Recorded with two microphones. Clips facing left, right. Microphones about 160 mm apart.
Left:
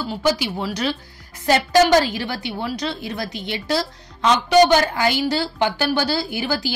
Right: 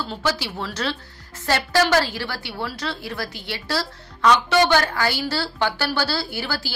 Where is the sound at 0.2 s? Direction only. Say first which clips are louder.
Left 6 dB; 15° left (ahead or behind).